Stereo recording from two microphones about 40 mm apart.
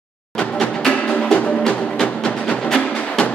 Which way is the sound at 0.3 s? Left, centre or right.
Centre.